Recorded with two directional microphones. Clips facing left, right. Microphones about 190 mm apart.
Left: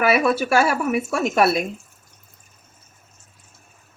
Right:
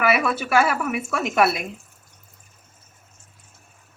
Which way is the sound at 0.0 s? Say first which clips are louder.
Left 3 dB; 30° left (ahead or behind).